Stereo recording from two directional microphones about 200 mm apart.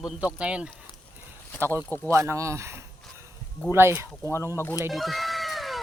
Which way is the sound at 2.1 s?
15° right (ahead or behind).